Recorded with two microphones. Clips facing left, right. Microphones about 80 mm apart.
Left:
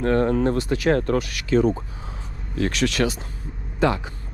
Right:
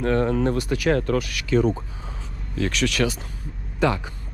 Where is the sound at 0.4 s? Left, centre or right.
Left.